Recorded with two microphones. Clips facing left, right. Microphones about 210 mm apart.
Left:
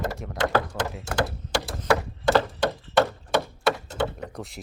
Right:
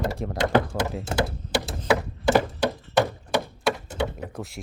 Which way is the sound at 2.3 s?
15° right (ahead or behind).